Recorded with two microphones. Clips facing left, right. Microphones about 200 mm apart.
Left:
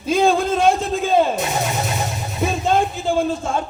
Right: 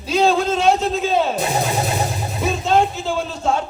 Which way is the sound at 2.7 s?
50° left (ahead or behind).